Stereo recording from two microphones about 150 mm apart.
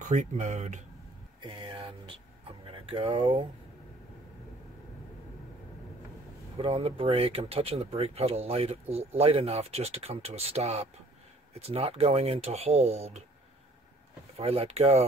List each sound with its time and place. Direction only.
0.1 s speech: 55° right (ahead or behind)
1.4 s a sound: 30° right (ahead or behind)
2.6 s speech: 35° right (ahead or behind)
6.6 s speech: 40° right (ahead or behind)
14.3 s speech: 40° right (ahead or behind)